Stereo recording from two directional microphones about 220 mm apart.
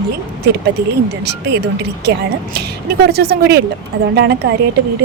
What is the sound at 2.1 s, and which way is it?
A woman's voice, 50° right (ahead or behind).